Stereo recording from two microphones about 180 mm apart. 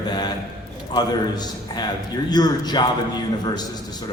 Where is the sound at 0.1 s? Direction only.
25° left (ahead or behind).